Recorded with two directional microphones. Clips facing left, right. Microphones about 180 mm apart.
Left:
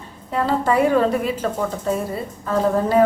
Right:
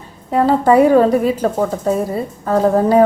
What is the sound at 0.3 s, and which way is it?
A woman's voice, 40° right (ahead or behind).